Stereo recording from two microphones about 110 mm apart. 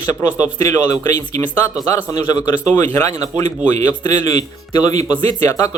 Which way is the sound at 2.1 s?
35° left (ahead or behind).